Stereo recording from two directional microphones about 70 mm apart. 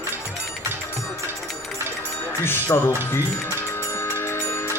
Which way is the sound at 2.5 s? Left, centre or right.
Left.